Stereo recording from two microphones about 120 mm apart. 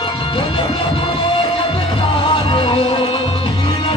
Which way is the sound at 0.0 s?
50° left (ahead or behind).